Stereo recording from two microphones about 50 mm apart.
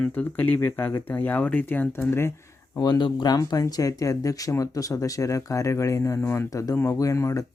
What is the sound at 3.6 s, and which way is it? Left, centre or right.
Speech, left.